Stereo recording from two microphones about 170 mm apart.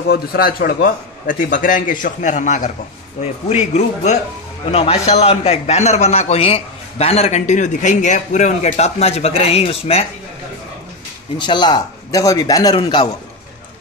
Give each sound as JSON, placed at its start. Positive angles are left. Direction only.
{"t": 0.1, "sound": "a man's voice", "side_deg": 60}
{"t": 11.3, "sound": "a man's voice", "side_deg": 25}